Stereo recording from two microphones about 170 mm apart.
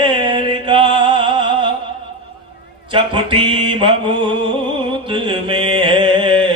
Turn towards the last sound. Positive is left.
turn(degrees=-30)  # may be behind; listen again after turning